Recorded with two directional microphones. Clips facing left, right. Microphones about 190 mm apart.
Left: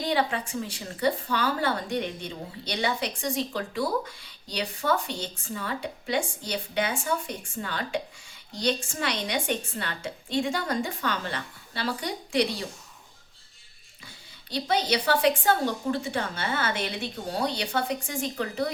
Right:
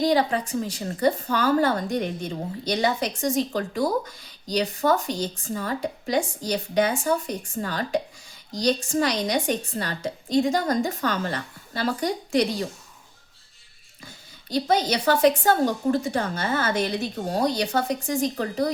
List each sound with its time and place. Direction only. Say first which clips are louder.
0.0 s a woman's voice: right 5 dB; 40° right (ahead or behind)
14.5 s a woman's voice: right 4 dB; 45° right (ahead or behind)